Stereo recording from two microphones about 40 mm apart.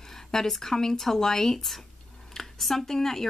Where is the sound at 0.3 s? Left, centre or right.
Centre.